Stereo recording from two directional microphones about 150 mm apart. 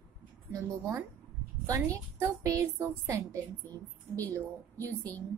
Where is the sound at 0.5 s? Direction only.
20° right (ahead or behind).